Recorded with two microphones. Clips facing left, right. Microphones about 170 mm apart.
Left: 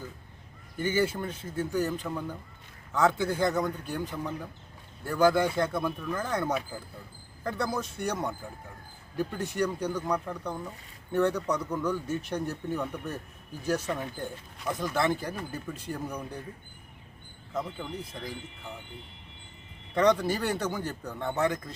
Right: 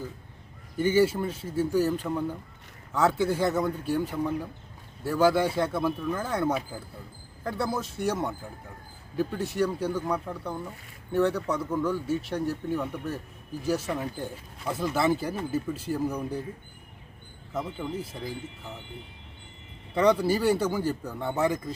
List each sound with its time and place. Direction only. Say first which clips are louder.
0.8 s speech: right 5 dB; 10° right (ahead or behind)
17.5 s speech: right 2 dB; 5° right (ahead or behind)
19.9 s speech: right 2 dB; 5° right (ahead or behind)